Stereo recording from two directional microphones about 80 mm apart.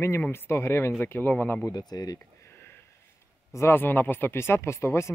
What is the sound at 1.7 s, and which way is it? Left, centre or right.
Speech, left.